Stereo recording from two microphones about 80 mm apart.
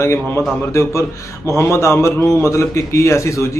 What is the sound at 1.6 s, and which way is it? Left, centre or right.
A man's voice, left.